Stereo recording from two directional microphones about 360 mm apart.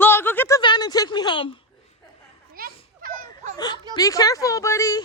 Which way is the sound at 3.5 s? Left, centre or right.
Centre.